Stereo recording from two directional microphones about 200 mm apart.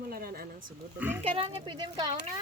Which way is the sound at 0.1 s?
50° right (ahead or behind).